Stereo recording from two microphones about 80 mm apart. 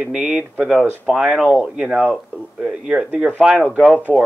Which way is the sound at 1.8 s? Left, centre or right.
Right.